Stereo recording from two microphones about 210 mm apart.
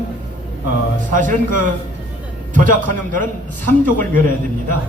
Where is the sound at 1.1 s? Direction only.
40° right (ahead or behind).